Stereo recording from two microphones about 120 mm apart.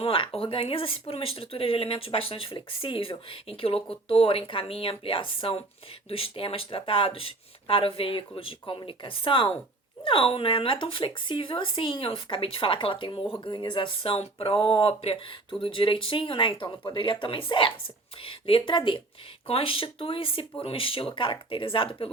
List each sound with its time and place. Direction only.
0.0 s speech: 50° left (ahead or behind)